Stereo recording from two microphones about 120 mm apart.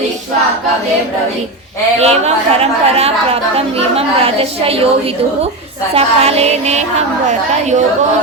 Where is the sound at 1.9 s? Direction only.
60° right (ahead or behind).